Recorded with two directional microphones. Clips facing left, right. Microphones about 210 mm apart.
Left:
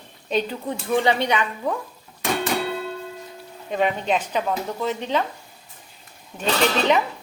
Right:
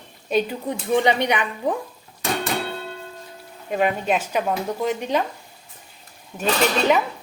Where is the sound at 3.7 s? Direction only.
5° right (ahead or behind).